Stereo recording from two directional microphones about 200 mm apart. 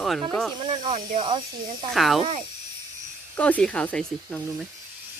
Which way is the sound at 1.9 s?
Centre (ahead or behind).